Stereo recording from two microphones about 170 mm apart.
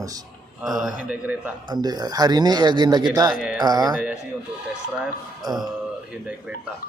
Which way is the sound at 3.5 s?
25° right (ahead or behind).